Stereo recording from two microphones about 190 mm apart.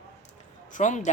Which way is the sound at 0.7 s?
40° left (ahead or behind).